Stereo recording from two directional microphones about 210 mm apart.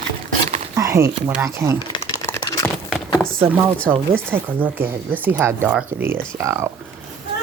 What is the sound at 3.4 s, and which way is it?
Speech, 10° right (ahead or behind).